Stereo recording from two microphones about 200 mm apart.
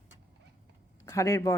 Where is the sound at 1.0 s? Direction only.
15° left (ahead or behind).